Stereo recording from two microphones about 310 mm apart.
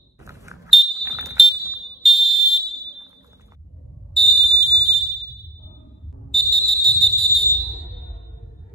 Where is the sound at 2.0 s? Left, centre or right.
Centre.